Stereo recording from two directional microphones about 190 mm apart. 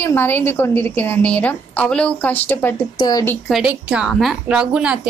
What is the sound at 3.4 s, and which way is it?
A woman's voice, 5° right (ahead or behind).